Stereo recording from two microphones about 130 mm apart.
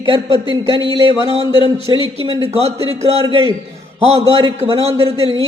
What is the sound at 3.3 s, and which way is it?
Speech, 45° right (ahead or behind).